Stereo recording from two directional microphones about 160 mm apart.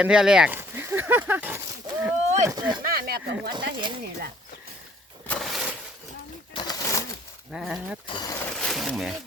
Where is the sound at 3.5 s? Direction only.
30° right (ahead or behind).